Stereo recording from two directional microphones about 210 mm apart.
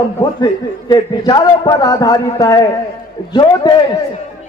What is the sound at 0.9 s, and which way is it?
A man's voice, 20° left (ahead or behind).